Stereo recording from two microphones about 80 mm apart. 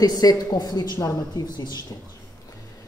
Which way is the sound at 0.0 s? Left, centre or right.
Left.